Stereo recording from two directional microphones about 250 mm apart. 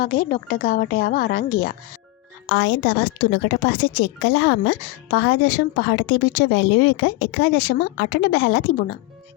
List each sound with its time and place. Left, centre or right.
0.0 s a woman's voice: left